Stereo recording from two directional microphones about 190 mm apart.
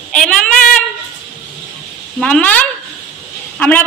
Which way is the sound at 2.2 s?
5° left (ahead or behind).